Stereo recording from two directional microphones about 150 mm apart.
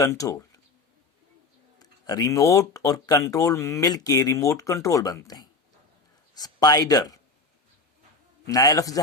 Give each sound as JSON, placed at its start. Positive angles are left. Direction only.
{"t": 0.0, "sound": "speech", "side_deg": 25}
{"t": 1.8, "sound": "speech", "side_deg": 25}
{"t": 8.4, "sound": "speech", "side_deg": 25}